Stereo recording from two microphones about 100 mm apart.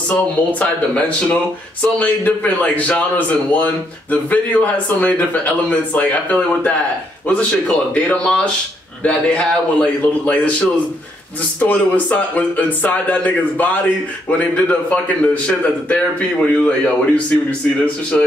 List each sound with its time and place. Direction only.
0.1 s speech: 15° left (ahead or behind)
11.6 s speech: 15° left (ahead or behind)